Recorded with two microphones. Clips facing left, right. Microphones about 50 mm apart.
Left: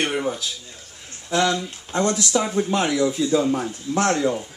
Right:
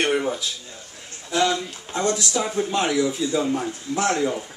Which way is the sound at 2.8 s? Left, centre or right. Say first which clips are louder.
Right 1 dB; centre.